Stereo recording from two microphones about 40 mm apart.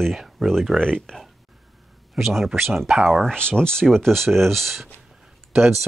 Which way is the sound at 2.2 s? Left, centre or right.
Centre.